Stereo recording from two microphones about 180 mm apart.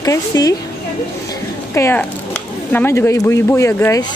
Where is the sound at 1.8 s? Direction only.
15° left (ahead or behind).